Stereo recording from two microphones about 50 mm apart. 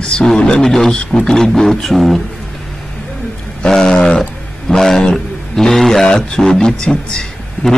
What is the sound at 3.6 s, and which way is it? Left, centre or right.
A man's voice, centre.